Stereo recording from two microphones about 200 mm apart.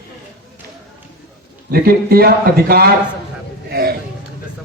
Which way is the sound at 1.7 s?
50° right (ahead or behind).